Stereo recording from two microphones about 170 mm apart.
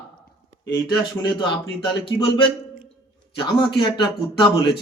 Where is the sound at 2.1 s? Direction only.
90° left.